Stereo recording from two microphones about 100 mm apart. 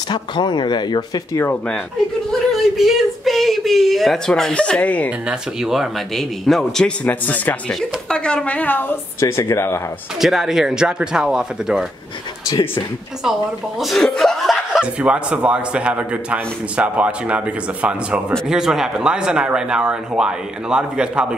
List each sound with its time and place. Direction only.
0.1 s speech: 50° left (ahead or behind)
2.5 s speech: centre (ahead or behind)
5.3 s speech: 5° right (ahead or behind)
7.1 s a woman's voice: 15° left (ahead or behind)
10.2 s speech: 5° right (ahead or behind)
13.7 s speech: centre (ahead or behind)
18.5 s speech: 5° right (ahead or behind)